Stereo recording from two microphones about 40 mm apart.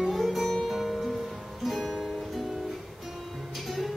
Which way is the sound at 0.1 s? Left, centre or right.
Centre.